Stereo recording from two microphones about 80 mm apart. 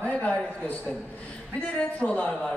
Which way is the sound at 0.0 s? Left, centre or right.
Centre.